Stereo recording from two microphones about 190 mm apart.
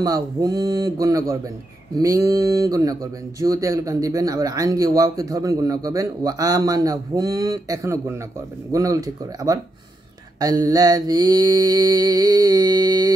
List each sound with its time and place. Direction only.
0.0 s speech: 20° right (ahead or behind)